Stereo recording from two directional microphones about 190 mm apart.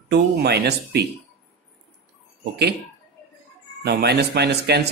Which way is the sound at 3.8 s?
60° right (ahead or behind).